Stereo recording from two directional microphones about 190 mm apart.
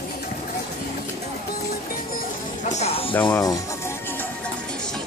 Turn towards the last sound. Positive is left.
turn(degrees=20)  # may be behind; listen again after turning